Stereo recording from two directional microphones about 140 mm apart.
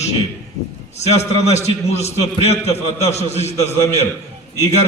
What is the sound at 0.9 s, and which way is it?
A man's voice, 50° left (ahead or behind).